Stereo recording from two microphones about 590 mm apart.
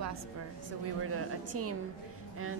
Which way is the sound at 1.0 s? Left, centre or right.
Right.